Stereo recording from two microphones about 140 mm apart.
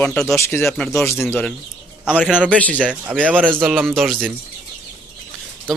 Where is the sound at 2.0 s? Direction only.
5° right (ahead or behind).